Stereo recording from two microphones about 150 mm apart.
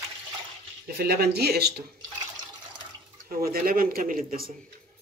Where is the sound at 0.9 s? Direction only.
90° right.